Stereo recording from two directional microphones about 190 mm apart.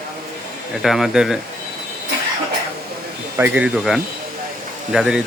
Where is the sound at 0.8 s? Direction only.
Centre (ahead or behind).